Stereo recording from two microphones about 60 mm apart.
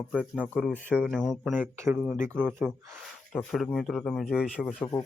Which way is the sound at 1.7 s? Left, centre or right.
Right.